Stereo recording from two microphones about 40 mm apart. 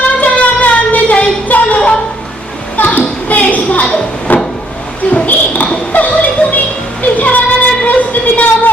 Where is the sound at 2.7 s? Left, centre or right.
Left.